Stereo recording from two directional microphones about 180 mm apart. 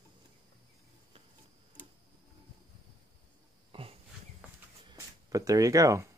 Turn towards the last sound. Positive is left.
turn(degrees=-15)  # may be behind; listen again after turning